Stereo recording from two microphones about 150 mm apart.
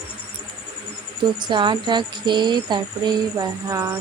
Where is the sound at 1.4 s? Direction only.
30° right (ahead or behind).